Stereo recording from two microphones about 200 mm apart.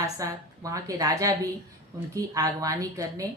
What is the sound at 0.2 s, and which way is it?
A woman's voice, 15° right (ahead or behind).